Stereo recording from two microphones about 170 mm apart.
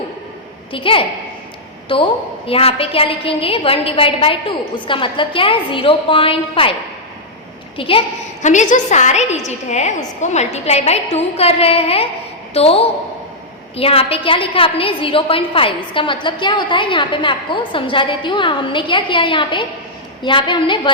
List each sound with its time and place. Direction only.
0.7 s a woman's voice: 30° left (ahead or behind)
7.8 s a woman's voice: 35° left (ahead or behind)